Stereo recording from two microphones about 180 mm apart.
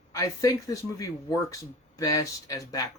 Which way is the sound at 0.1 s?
20° left (ahead or behind).